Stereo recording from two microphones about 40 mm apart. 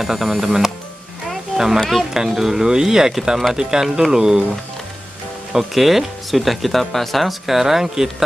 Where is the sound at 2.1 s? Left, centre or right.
Centre.